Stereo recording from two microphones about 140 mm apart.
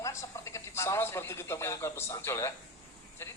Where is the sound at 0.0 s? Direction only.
20° left (ahead or behind).